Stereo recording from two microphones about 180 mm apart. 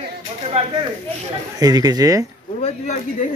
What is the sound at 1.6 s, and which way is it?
Speech, 20° right (ahead or behind).